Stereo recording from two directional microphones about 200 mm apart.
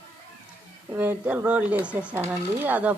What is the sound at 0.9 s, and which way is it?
A woman's voice, 10° right (ahead or behind).